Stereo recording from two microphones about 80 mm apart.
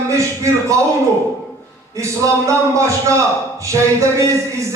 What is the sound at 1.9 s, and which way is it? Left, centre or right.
Speech, right.